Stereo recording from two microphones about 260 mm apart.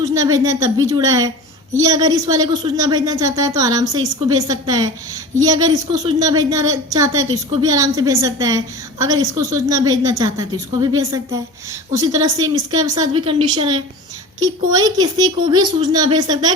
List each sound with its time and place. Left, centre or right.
0.0 s a woman's voice: centre